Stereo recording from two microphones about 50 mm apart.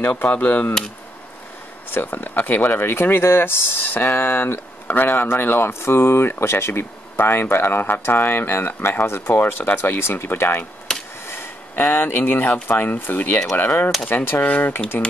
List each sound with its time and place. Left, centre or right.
0.2 s speech: left
1.9 s speech: left
10.9 s a sound: centre
11.7 s speech: left
12.2 s speech: left
14.4 s speech: left